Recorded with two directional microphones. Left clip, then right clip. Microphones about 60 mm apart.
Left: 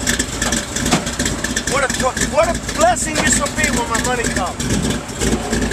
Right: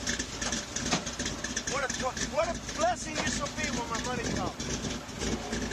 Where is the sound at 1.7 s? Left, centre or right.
Centre.